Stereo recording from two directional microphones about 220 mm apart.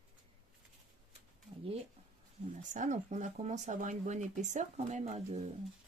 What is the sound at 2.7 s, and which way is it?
Speech, 35° right (ahead or behind).